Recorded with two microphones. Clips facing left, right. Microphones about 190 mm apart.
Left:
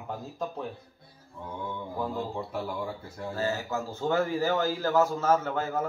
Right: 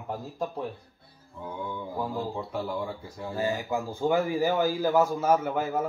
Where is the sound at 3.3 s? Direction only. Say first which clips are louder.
Right 2 dB; 15° right (ahead or behind).